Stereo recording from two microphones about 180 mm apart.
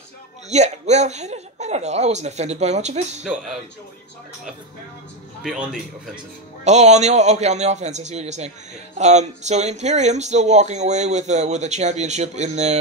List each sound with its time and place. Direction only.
0.5 s speech: 40° right (ahead or behind)
5.4 s a man's voice: centre (ahead or behind)
6.6 s speech: 40° right (ahead or behind)